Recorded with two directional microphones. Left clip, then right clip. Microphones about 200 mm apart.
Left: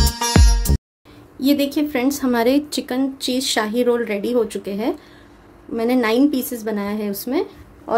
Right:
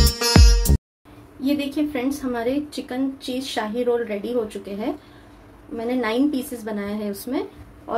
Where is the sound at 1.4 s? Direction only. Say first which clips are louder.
Left 5 dB; 40° left (ahead or behind).